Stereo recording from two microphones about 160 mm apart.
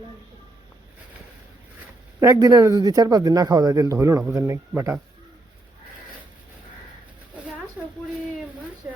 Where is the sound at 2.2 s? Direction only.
20° right (ahead or behind).